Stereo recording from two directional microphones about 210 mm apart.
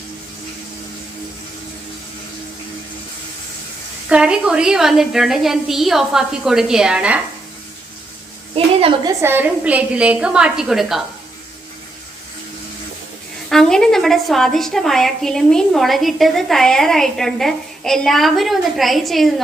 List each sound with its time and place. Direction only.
4.1 s a woman's voice: 5° right (ahead or behind)
8.5 s a sound: 25° right (ahead or behind)
9.2 s a woman's voice: 10° right (ahead or behind)
13.5 s a woman's voice: centre (ahead or behind)